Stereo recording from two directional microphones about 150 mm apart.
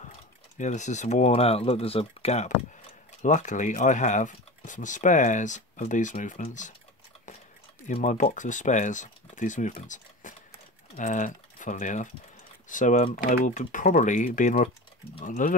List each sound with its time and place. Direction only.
0.6 s speech: 50° left (ahead or behind)
7.9 s speech: 55° left (ahead or behind)
10.2 s a sound: 55° left (ahead or behind)
11.0 s speech: 55° left (ahead or behind)